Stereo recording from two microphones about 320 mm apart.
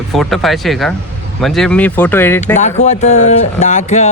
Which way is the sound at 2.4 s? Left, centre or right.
Left.